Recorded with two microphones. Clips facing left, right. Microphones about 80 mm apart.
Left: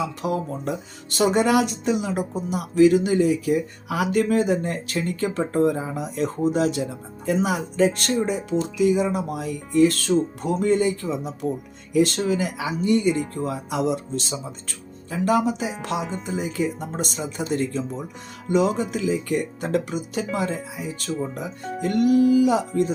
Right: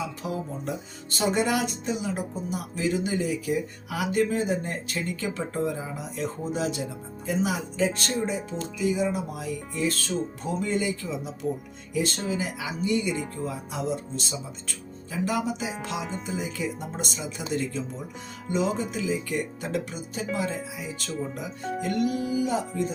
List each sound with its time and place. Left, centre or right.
0.0 s speech: left
11.9 s speech: left
16.0 s speech: centre
16.2 s speech: left